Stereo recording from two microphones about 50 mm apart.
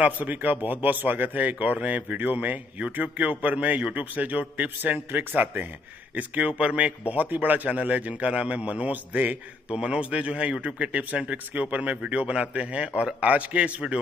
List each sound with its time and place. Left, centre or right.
0.0 s speech: right